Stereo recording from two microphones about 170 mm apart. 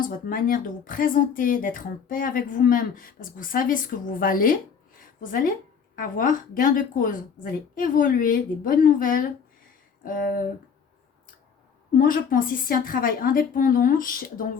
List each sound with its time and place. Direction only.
0.0 s a woman's voice: 55° left (ahead or behind)
11.9 s a woman's voice: 55° left (ahead or behind)